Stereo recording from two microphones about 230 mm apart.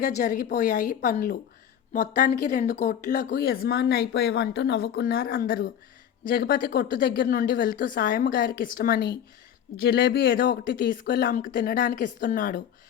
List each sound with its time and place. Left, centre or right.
0.2 s speech: left